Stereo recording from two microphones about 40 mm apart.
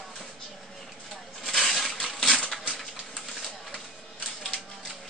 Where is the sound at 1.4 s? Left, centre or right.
Centre.